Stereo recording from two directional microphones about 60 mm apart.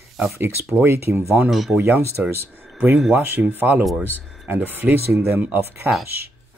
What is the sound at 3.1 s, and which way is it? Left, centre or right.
Speech, right.